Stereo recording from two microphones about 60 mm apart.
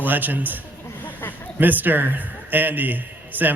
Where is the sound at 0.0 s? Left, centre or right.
Right.